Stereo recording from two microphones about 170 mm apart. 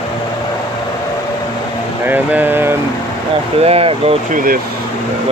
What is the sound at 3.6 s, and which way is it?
Speech, 35° right (ahead or behind).